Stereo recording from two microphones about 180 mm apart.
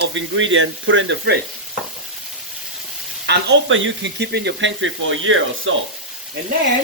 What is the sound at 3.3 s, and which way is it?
Speech, 75° right (ahead or behind).